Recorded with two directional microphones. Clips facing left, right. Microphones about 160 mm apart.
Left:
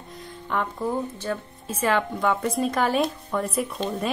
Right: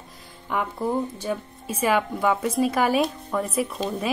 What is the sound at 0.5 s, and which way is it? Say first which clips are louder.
Speech: right 1 dB; 10° right (ahead or behind).